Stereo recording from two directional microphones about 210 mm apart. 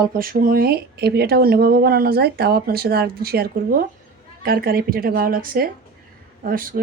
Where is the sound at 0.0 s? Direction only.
45° right (ahead or behind).